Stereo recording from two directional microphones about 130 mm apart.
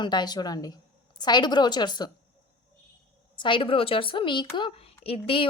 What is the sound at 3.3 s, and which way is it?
A woman's voice, 40° left (ahead or behind).